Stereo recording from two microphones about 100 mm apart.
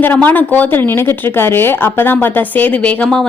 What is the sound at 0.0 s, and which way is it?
A woman's voice, 15° left (ahead or behind).